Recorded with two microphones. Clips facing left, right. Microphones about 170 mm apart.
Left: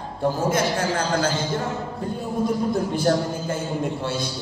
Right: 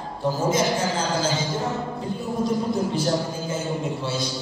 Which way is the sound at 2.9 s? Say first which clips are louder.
Left 3 dB; 55° left (ahead or behind).